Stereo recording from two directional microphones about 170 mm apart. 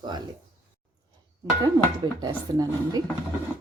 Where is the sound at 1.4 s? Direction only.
20° right (ahead or behind).